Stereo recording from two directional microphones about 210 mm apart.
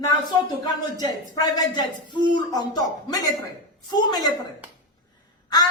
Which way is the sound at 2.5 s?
20° left (ahead or behind).